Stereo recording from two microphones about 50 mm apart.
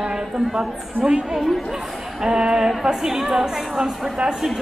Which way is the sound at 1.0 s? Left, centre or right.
Centre.